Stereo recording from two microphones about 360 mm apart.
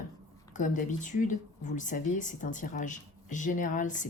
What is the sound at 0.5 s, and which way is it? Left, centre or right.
Speech, left.